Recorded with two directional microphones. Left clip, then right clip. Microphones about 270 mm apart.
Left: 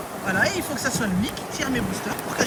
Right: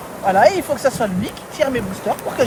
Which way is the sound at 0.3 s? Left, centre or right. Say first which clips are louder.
Right 10 dB; right.